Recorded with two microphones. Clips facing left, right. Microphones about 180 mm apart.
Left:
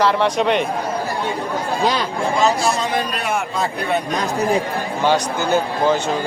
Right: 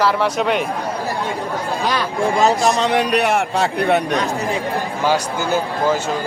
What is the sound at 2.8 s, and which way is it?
A man's voice, 70° right (ahead or behind).